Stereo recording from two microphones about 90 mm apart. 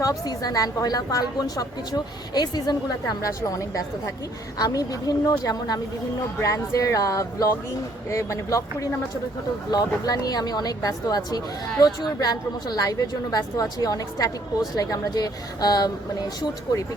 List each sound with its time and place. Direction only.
0.0 s speech: 45° left (ahead or behind)